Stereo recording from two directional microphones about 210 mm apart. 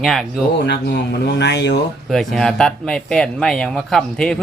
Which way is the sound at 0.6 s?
50° left (ahead or behind).